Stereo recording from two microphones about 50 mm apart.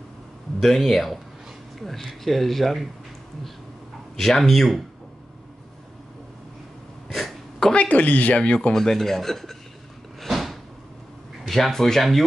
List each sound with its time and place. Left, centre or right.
0.6 s speech: centre
4.2 s speech: centre
7.1 s throat clearing: centre
7.7 s a woman's voice: left
8.5 s speech: centre
10.2 s a sound: centre
11.5 s speech: centre